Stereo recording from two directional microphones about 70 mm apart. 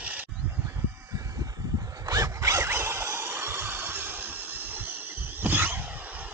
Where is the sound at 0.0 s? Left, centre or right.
Right.